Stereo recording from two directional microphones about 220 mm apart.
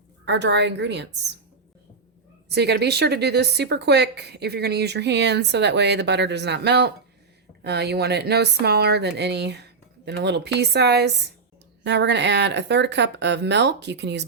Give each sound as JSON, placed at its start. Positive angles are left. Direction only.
{"t": 0.3, "sound": "a woman's voice", "side_deg": -50}
{"t": 2.5, "sound": "a woman's voice", "side_deg": -50}